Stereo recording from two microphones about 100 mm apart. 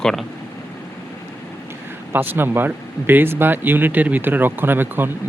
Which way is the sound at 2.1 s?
20° right (ahead or behind).